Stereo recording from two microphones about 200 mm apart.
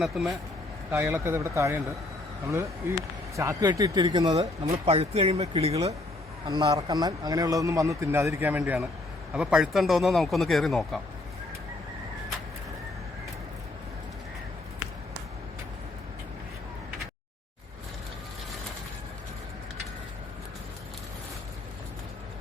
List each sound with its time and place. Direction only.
0.0 s speech: centre (ahead or behind)
0.9 s speech: 10° right (ahead or behind); by 5.7 s 30° right (ahead or behind)
6.5 s speech: 15° right (ahead or behind); by 11.0 s centre (ahead or behind)